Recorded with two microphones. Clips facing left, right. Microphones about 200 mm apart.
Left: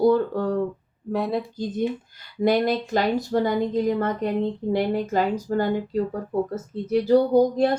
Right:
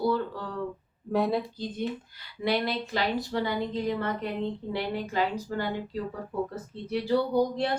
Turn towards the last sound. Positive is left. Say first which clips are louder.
# left 7 dB
turn(degrees=45)  # may be behind; listen again after turning